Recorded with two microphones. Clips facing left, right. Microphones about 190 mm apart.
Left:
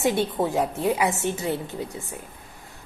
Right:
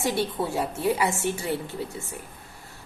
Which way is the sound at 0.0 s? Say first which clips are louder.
Left 3 dB; 20° left (ahead or behind).